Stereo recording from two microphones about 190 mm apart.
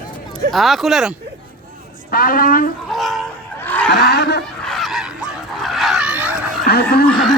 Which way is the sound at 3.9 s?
60° left (ahead or behind).